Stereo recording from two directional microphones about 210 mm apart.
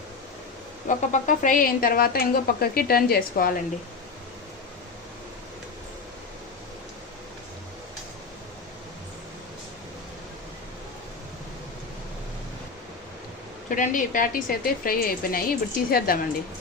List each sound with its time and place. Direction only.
0.9 s a woman's voice: 40° left (ahead or behind)
13.7 s a woman's voice: 40° left (ahead or behind)